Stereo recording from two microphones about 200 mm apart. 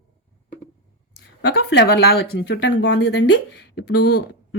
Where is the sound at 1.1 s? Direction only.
55° left (ahead or behind).